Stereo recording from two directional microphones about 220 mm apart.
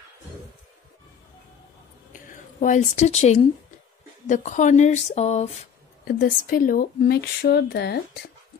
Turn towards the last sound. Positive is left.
turn(degrees=50)  # may be behind; listen again after turning